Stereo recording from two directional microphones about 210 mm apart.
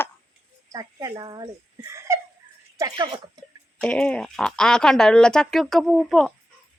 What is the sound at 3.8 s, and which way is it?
Speech, 5° left (ahead or behind).